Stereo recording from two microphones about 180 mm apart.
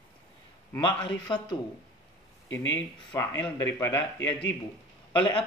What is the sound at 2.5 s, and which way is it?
Speech, 90° left.